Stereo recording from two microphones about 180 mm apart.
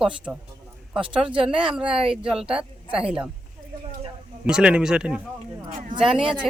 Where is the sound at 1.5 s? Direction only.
5° right (ahead or behind).